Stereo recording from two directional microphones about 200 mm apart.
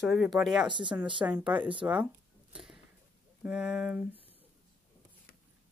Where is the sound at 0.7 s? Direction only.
25° right (ahead or behind).